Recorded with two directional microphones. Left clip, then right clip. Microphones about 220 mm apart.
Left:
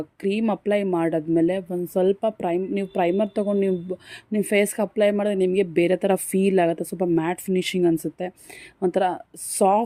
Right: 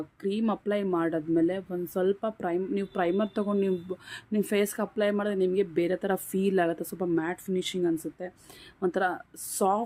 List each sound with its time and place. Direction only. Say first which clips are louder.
0.2 s a woman's voice: left 6 dB; 30° left (ahead or behind)